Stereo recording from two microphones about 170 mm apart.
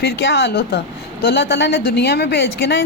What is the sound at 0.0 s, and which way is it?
A woman's voice, 90° left.